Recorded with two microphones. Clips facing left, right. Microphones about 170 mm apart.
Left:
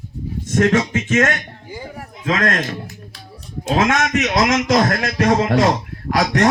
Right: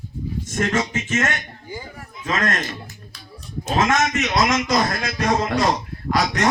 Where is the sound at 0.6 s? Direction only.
55° left (ahead or behind).